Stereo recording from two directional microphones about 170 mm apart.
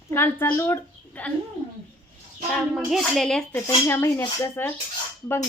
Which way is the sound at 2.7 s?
Centre (ahead or behind).